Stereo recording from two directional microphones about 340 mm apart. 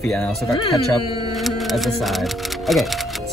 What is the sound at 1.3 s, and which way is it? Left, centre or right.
Music, centre.